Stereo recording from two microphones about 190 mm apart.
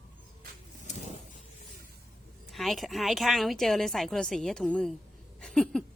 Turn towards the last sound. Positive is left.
turn(degrees=5)  # may be behind; listen again after turning